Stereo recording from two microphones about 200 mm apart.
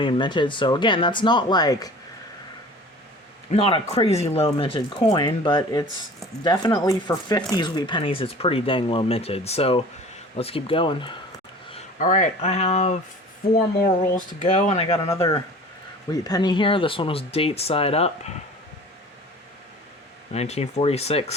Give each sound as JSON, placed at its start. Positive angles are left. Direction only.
{"t": 0.0, "sound": "speech", "side_deg": 25}
{"t": 3.5, "sound": "speech", "side_deg": 30}
{"t": 11.9, "sound": "speech", "side_deg": 40}
{"t": 15.1, "sound": "speech", "side_deg": 15}
{"t": 20.3, "sound": "speech", "side_deg": 30}